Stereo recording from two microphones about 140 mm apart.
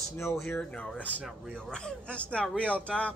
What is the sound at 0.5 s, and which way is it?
Speech, 10° left (ahead or behind).